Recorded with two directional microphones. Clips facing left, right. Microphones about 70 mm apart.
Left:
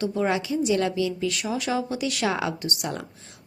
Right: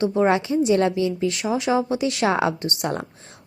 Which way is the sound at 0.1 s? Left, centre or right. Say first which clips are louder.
Right 5 dB; right.